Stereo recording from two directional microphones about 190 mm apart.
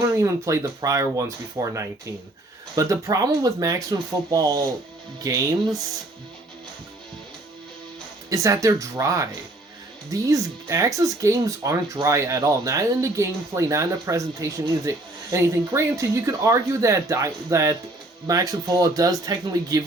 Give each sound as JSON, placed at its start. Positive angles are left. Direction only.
{"t": 0.0, "sound": "speech", "side_deg": -15}
{"t": 8.3, "sound": "speech", "side_deg": -15}